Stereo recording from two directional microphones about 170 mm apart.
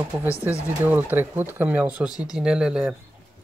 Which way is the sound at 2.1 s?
25° left (ahead or behind).